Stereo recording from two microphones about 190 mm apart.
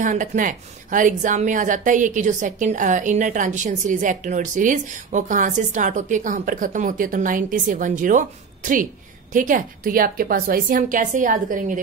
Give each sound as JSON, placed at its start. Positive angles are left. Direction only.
{"t": 0.0, "sound": "a woman's voice", "side_deg": -40}